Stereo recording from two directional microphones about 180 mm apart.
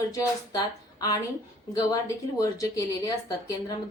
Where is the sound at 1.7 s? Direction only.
20° left (ahead or behind).